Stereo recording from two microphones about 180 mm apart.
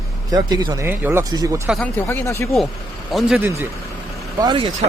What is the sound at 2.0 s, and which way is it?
Speech, 15° left (ahead or behind).